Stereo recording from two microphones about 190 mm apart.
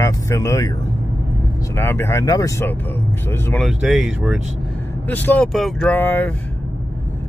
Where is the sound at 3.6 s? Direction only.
Centre (ahead or behind).